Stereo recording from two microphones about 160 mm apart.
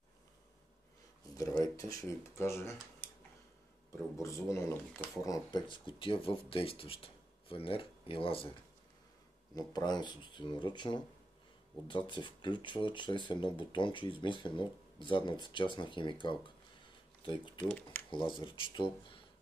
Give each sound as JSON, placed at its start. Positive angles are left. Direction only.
{"t": 1.6, "sound": "speech", "side_deg": 20}
{"t": 4.2, "sound": "speech", "side_deg": 20}
{"t": 9.6, "sound": "speech", "side_deg": 25}
{"t": 17.6, "sound": "speech", "side_deg": 10}
{"t": 18.1, "sound": "speech", "side_deg": 30}